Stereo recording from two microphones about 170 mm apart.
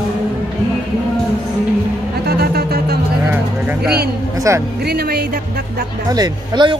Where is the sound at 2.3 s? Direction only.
65° right (ahead or behind).